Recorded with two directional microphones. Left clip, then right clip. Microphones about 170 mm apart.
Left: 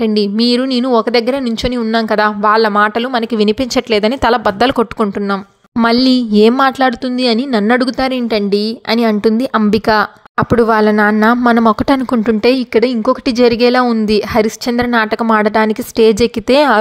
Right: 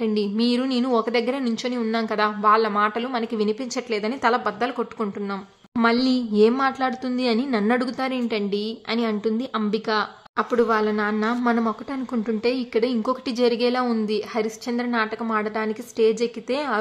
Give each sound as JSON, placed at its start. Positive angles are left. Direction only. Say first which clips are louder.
{"t": 0.0, "sound": "a woman's voice", "louder": "left 10 dB", "side_deg": 45}